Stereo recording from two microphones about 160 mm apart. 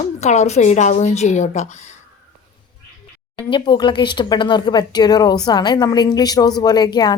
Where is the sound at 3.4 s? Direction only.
30° left (ahead or behind).